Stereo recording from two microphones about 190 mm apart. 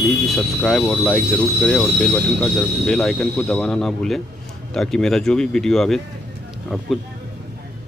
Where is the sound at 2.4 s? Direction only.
Centre (ahead or behind).